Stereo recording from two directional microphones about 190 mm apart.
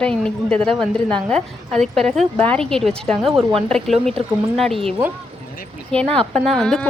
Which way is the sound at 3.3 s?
25° right (ahead or behind).